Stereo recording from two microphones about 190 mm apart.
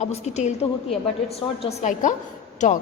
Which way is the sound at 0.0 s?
35° left (ahead or behind).